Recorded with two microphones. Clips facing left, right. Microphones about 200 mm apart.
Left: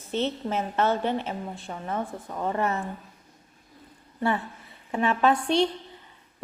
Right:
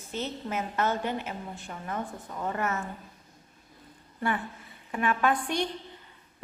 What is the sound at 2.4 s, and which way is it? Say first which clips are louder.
Speech: left 4 dB; 30° left (ahead or behind).